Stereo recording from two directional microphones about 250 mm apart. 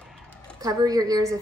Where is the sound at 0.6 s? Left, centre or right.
Centre.